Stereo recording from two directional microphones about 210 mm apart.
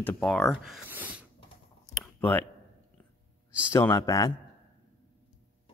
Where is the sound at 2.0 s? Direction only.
10° left (ahead or behind).